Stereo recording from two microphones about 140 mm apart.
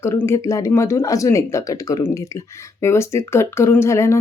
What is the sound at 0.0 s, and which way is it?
Speech, 20° left (ahead or behind).